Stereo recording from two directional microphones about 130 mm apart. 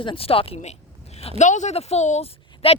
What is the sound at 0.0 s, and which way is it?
A woman's voice, 45° left (ahead or behind).